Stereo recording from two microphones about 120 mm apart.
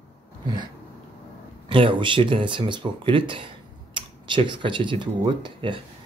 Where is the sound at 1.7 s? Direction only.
45° right (ahead or behind).